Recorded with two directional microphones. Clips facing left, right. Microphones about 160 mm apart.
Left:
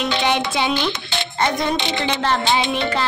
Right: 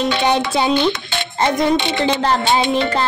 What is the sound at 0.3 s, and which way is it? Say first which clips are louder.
Speech: right 4 dB; 35° right (ahead or behind).